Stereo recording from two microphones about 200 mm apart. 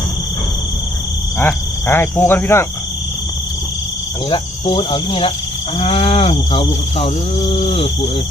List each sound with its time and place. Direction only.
1.4 s speech: 10° left (ahead or behind)
4.3 s livestock: 25° left (ahead or behind)